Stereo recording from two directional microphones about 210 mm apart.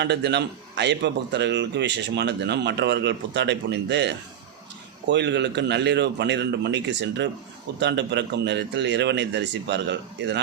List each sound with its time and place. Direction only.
0.0 s speech: 55° right (ahead or behind)